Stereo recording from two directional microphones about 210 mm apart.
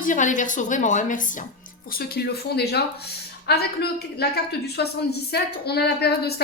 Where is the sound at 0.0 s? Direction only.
35° left (ahead or behind).